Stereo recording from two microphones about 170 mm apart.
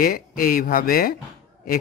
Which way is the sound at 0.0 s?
60° left (ahead or behind).